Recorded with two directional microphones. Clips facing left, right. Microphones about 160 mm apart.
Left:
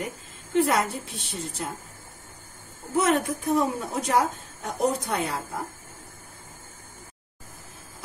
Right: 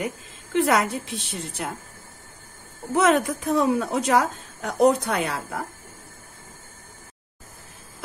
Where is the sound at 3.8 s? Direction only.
90° right; by 5.6 s 75° right (ahead or behind).